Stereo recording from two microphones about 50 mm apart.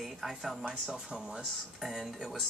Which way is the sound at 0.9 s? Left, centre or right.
Centre.